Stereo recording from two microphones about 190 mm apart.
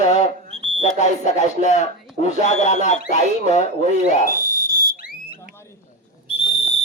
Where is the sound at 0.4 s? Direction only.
35° right (ahead or behind).